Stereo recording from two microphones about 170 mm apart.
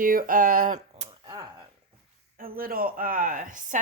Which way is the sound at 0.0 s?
55° right (ahead or behind).